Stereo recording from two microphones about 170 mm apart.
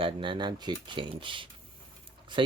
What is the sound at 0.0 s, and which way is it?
Speech, 30° right (ahead or behind).